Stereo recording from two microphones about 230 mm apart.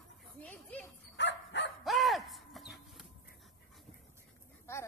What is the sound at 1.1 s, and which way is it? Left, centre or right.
Dog, left.